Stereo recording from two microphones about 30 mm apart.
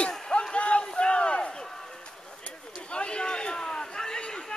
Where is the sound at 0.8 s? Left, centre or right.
Left.